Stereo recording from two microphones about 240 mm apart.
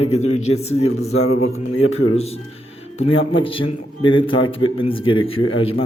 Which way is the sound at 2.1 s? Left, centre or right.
Left.